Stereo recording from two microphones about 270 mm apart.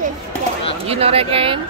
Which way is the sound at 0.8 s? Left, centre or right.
Right.